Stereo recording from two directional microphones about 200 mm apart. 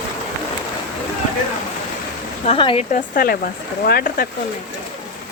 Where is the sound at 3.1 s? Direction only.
45° left (ahead or behind).